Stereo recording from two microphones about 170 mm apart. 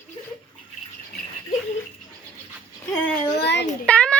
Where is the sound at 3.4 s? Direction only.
85° left.